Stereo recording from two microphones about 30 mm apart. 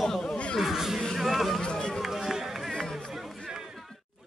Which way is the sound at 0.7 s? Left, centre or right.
Centre.